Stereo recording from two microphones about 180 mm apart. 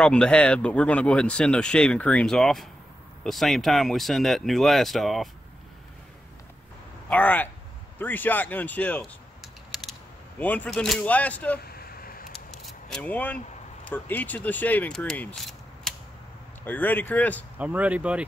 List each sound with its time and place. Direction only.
0.0 s speech: 5° left (ahead or behind)
7.1 s speech: 10° left (ahead or behind)
9.4 s a sound: centre (ahead or behind)
10.4 s speech: 10° left (ahead or behind)
11.6 s vehicle: 55° left (ahead or behind)
12.3 s scissors: 5° left (ahead or behind)
13.8 s speech: 10° left (ahead or behind)
17.6 s speech: 10° right (ahead or behind)